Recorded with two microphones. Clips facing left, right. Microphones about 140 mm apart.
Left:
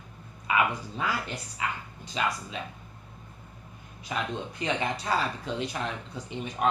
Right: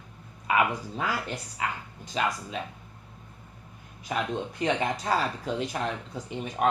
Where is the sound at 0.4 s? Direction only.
45° right (ahead or behind).